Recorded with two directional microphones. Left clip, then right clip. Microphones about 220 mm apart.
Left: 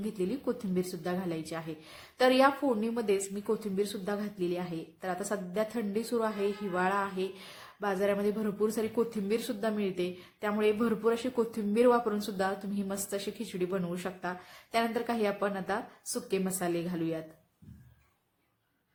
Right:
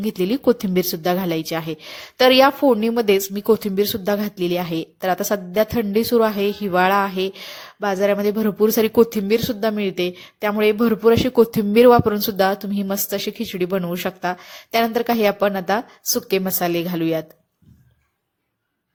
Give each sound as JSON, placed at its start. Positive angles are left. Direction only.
{"t": 0.2, "sound": "a woman's voice", "side_deg": -40}